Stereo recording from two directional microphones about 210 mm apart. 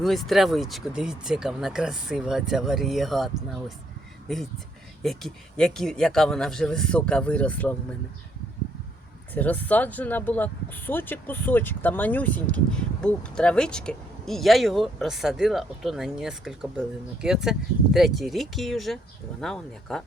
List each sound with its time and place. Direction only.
0.0 s speech: centre (ahead or behind)
9.3 s speech: 10° left (ahead or behind)